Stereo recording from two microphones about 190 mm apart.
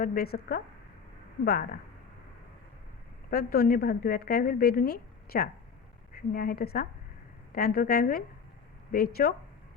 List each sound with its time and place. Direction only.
0.0 s a woman's voice: 50° left (ahead or behind)
3.2 s a woman's voice: 55° left (ahead or behind)